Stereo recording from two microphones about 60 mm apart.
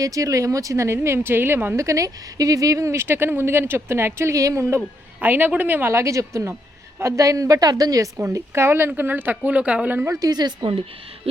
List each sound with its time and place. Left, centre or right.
0.0 s a woman's voice: right
1.0 s a woman's voice: right
1.7 s speech: right
5.2 s a woman's voice: right
5.9 s a woman's voice: right
8.3 s speech: right
9.0 s speech: right
10.1 s speech: right